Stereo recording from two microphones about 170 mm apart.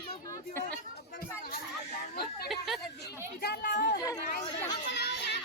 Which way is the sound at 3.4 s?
60° left (ahead or behind).